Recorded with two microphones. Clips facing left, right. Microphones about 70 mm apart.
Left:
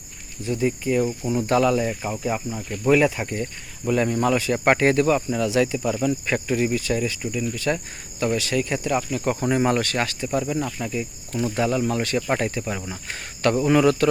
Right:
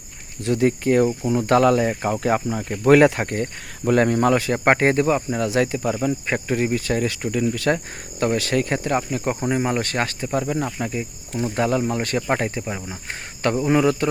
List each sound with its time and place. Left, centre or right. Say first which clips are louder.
0.4 s speech: right 4 dB; right
1.3 s speech: right 2 dB; right
2.2 s speech: right 5 dB; right
5.8 s speech: right 1 dB; right
7.7 s speech: right 3 dB; right
8.2 s speech: right 2 dB; right
9.0 s cricket: even; right
9.4 s speech: left 2 dB; centre
9.8 s speech: right 1 dB; right
11.6 s speech: right 2 dB; right
12.3 s cricket: right 3 dB; right
12.6 s speech: even; centre
13.7 s cricket: left 1 dB; centre